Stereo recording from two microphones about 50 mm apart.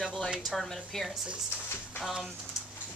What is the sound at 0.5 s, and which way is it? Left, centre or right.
Speech, centre.